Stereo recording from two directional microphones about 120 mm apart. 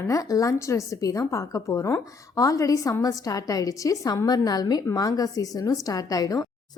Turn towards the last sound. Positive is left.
turn(degrees=30)  # may be behind; listen again after turning